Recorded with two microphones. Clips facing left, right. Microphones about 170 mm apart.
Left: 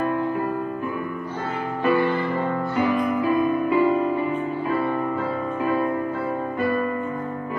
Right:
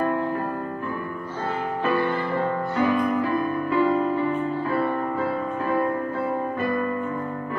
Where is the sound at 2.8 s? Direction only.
15° left (ahead or behind).